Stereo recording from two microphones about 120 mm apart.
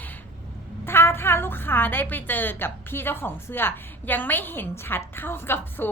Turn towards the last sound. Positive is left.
turn(degrees=20)  # may be behind; listen again after turning